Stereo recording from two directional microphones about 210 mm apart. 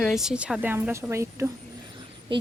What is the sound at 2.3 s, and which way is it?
Speech, 25° right (ahead or behind).